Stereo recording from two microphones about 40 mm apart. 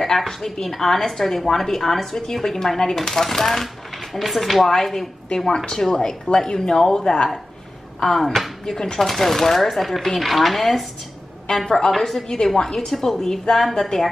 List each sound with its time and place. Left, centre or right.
0.0 s a woman's voice: centre